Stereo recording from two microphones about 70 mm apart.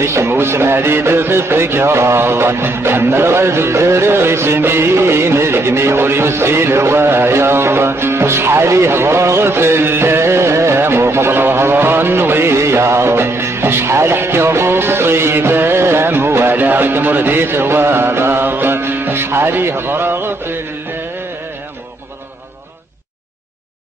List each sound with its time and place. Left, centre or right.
0.0 s speech: right